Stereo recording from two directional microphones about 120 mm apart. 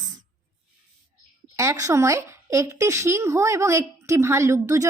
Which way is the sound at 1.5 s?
25° right (ahead or behind).